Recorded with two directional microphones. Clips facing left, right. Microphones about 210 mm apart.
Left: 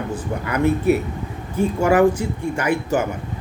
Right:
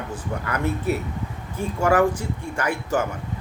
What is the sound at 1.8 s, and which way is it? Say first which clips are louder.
Speech: left 3 dB; 20° left (ahead or behind).